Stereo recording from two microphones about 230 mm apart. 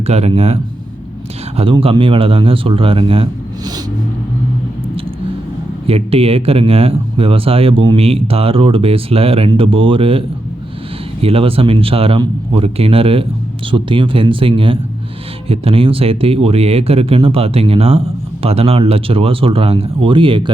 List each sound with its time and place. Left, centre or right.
0.0 s speech: right
5.9 s speech: right